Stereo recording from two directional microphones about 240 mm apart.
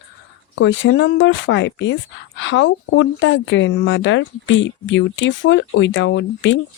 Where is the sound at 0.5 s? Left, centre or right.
Left.